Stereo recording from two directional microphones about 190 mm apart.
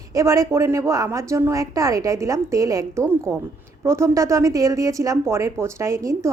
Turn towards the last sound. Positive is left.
turn(degrees=-15)  # may be behind; listen again after turning